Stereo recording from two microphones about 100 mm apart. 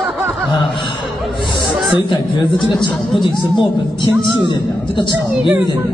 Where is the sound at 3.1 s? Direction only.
50° left (ahead or behind).